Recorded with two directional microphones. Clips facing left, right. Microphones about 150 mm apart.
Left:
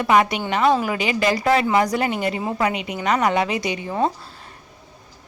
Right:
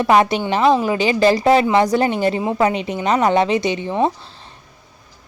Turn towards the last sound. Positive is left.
turn(degrees=-25)  # may be behind; listen again after turning